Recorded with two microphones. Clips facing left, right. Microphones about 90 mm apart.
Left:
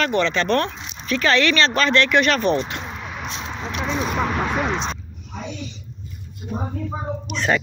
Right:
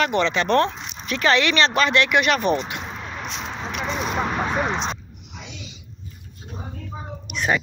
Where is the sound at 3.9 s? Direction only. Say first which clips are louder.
Left 2 dB; 5° left (ahead or behind).